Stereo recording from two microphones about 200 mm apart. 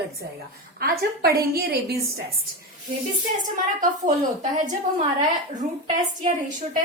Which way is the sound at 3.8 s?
40° right (ahead or behind).